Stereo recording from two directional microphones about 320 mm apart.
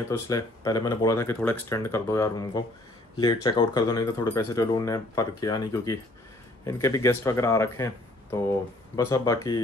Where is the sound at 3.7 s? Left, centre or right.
Centre.